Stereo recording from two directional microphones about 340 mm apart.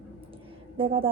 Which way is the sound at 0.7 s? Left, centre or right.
Centre.